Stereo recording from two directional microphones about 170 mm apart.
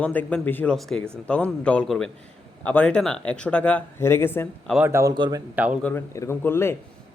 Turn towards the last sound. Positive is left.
turn(degrees=15)  # may be behind; listen again after turning